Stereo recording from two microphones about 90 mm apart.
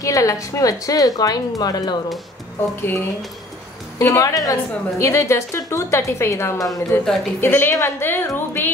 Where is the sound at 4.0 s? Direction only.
35° left (ahead or behind).